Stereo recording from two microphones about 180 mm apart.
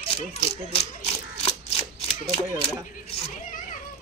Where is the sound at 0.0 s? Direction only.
35° left (ahead or behind).